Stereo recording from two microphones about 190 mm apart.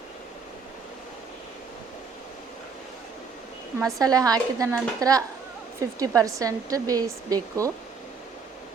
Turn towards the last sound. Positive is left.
turn(degrees=-20)  # may be behind; listen again after turning